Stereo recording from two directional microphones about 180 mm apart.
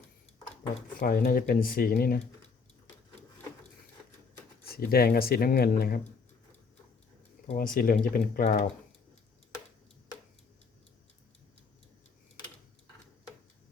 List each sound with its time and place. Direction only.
0.9 s speech: 55° left (ahead or behind)
4.6 s speech: 60° left (ahead or behind)
7.5 s speech: 50° left (ahead or behind)